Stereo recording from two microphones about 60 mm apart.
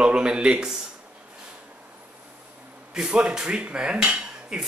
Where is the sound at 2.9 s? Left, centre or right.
Centre.